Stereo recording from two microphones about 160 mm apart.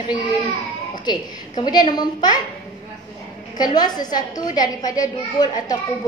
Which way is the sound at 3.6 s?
25° left (ahead or behind).